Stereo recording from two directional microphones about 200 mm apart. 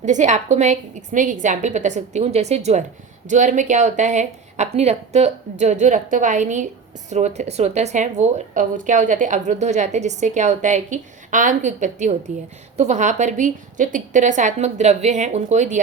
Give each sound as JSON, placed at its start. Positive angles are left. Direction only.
{"t": 0.0, "sound": "speech", "side_deg": -35}